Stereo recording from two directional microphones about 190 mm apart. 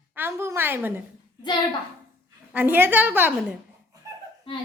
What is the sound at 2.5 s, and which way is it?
Speech, 10° right (ahead or behind).